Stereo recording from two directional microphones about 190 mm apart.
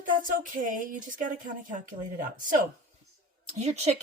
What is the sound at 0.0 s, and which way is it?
Speech, 45° right (ahead or behind).